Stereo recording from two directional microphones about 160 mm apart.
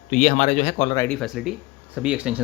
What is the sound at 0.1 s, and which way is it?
Speech, 45° left (ahead or behind).